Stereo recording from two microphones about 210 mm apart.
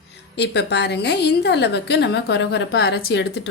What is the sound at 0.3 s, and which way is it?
A woman's voice, 55° left (ahead or behind).